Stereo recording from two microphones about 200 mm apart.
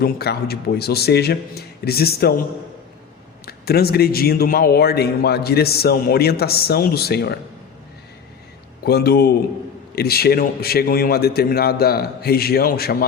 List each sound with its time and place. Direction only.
0.0 s a man's voice: 50° left (ahead or behind)
3.4 s a man's voice: 50° left (ahead or behind)
8.8 s a man's voice: 55° left (ahead or behind)